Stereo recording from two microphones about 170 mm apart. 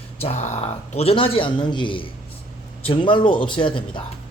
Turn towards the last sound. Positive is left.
turn(degrees=30)  # may be behind; listen again after turning